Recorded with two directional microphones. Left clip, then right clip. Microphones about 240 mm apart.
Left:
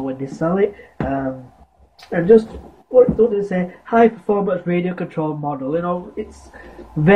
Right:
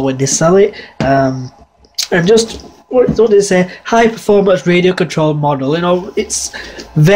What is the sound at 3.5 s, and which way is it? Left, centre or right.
Speech, right.